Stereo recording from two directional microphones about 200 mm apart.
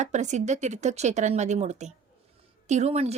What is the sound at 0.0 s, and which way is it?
A woman's voice, 35° right (ahead or behind).